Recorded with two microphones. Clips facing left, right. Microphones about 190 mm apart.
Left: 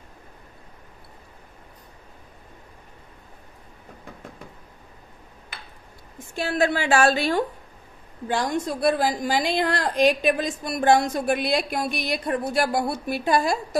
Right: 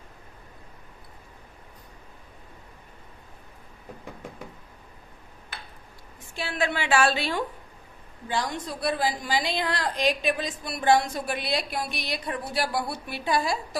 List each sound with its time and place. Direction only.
6.3 s a woman's voice: 45° left (ahead or behind)